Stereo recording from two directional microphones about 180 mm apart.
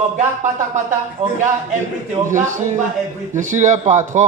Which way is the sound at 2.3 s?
45° right (ahead or behind).